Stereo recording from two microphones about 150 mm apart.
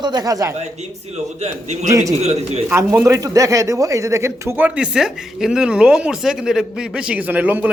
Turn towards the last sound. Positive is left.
turn(degrees=-10)  # may be behind; listen again after turning